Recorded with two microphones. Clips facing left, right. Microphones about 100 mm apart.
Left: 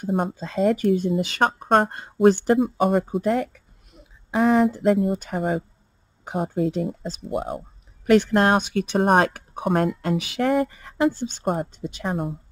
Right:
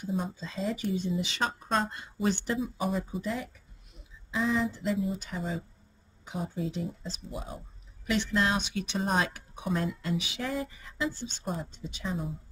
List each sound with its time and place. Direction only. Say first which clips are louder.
0.0 s speech: left 9 dB; 60° left (ahead or behind)